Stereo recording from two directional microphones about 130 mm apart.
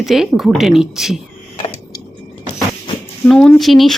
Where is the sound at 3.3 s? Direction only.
5° left (ahead or behind).